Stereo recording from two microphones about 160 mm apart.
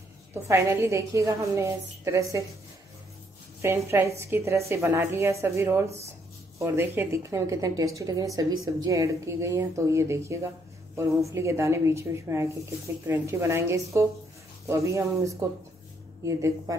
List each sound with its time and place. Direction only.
0.3 s speech: 15° right (ahead or behind)
3.6 s speech: 15° right (ahead or behind)